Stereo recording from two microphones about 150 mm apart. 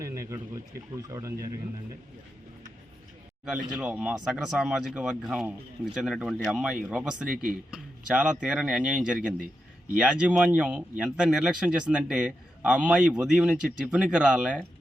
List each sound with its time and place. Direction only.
0.0 s speech: 20° right (ahead or behind)
3.8 s speech: 5° right (ahead or behind)